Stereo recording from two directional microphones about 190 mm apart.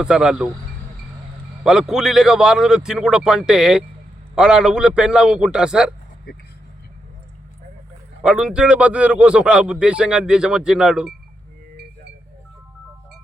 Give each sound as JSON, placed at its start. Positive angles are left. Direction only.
{"t": 0.0, "sound": "a man's voice", "side_deg": -5}
{"t": 1.6, "sound": "a man's voice", "side_deg": -5}
{"t": 8.2, "sound": "a man's voice", "side_deg": -5}